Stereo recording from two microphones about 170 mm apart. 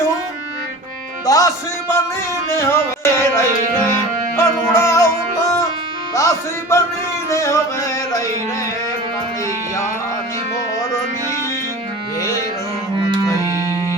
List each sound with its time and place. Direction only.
1.3 s speech: 20° left (ahead or behind)
2.6 s music: 15° left (ahead or behind)
6.1 s speech: 20° left (ahead or behind)
7.3 s music: 20° left (ahead or behind)